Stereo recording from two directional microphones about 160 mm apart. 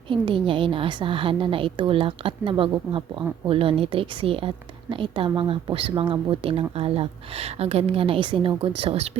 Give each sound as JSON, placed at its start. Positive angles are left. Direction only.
{"t": 0.1, "sound": "a woman's voice", "side_deg": -30}